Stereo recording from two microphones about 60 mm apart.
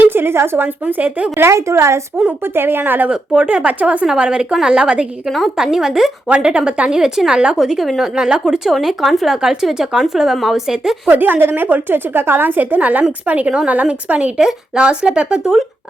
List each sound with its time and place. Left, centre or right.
0.0 s a woman's voice: right
1.4 s a woman's voice: right
2.4 s a woman's voice: right
3.1 s speech: right
4.0 s speech: centre
6.2 s a woman's voice: centre
11.1 s a woman's voice: right
14.3 s speech: centre